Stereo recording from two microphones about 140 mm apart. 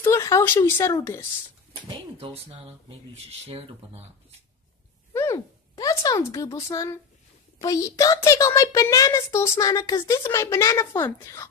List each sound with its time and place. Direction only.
0.0 s speech: 20° left (ahead or behind)
1.9 s speech: 35° right (ahead or behind)
5.1 s a sound: 20° left (ahead or behind)
7.6 s a child's voice: 25° left (ahead or behind)